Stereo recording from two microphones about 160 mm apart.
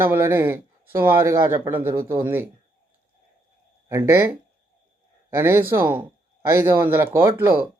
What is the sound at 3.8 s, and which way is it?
Speech, 15° right (ahead or behind).